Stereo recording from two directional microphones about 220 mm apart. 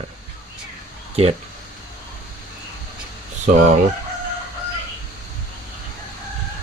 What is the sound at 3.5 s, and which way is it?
Fowl, 35° right (ahead or behind).